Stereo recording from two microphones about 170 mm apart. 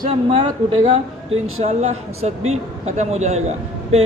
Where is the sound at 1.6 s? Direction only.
40° right (ahead or behind).